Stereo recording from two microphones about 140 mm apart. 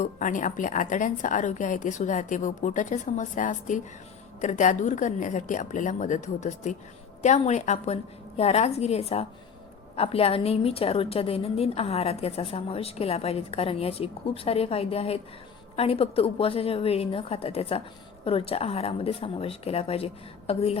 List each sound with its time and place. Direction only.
0.0 s a woman's voice: 65° left (ahead or behind); by 20.7 s 45° left (ahead or behind)